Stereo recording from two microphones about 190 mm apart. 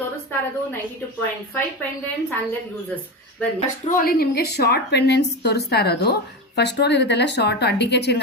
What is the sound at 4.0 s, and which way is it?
A woman's voice, 50° left (ahead or behind).